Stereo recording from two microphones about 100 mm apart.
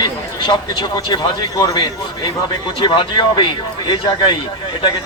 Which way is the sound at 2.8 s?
60° left (ahead or behind).